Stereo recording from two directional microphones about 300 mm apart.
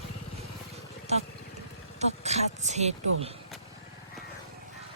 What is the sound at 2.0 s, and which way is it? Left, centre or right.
Speech, right.